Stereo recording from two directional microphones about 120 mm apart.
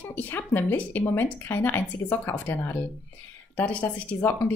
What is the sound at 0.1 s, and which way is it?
A woman's voice, 15° left (ahead or behind).